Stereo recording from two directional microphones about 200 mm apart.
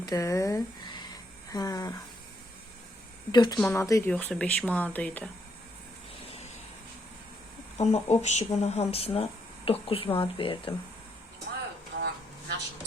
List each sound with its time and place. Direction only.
0.0 s speech: 15° left (ahead or behind)
3.3 s speech: 20° left (ahead or behind)
7.8 s speech: 35° left (ahead or behind)
11.9 s a sound: 55° right (ahead or behind)